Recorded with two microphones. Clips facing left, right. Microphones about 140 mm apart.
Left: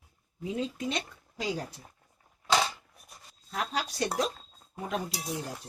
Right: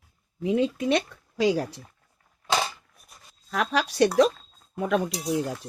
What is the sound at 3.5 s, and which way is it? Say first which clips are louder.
Speech: right 7 dB; 75° right (ahead or behind).